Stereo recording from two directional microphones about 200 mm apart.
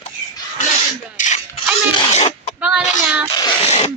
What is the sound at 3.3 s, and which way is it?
Speech, 25° left (ahead or behind).